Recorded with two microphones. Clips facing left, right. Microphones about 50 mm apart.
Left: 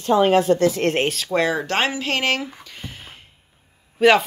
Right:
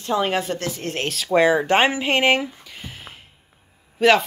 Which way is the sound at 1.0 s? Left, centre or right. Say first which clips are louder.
Left 3 dB; centre.